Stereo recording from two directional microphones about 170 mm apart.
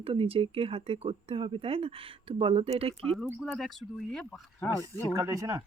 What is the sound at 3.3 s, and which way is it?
Speech, 5° right (ahead or behind).